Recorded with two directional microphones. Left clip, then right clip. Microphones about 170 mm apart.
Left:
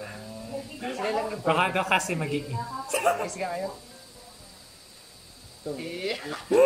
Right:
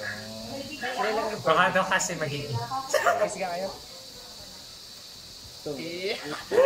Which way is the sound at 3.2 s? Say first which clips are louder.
Right 1 dB; centre (ahead or behind).